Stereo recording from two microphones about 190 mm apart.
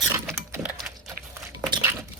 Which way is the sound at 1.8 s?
10° right (ahead or behind).